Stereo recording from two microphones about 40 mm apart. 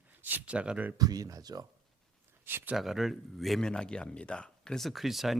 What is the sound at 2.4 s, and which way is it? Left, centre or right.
Speech, right.